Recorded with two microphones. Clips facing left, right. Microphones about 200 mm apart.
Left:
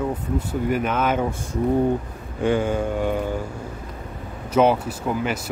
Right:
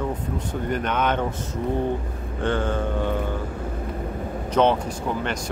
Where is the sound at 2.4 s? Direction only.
10° left (ahead or behind).